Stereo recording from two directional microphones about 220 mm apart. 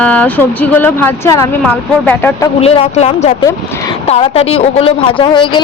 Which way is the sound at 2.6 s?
25° left (ahead or behind).